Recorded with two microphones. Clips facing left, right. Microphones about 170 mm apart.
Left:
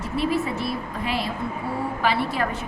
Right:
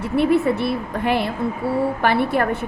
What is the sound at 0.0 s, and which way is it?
Speech, 60° right (ahead or behind).